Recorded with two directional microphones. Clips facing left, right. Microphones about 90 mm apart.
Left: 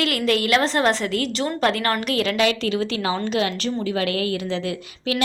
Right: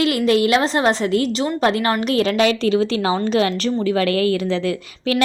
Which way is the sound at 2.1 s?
30° right (ahead or behind).